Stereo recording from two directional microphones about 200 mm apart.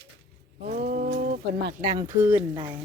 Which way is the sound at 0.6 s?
40° right (ahead or behind).